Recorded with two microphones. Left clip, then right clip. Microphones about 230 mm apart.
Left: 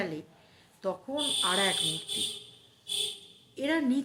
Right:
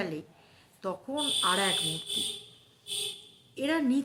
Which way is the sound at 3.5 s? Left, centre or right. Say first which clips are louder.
Even; centre.